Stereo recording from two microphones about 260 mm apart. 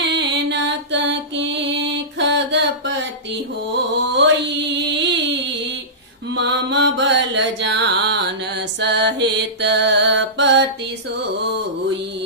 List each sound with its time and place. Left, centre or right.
0.0 s mantra: right
4.9 s a sound: right
6.3 s mantra: right